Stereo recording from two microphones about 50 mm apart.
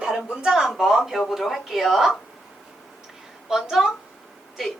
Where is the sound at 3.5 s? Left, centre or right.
Centre.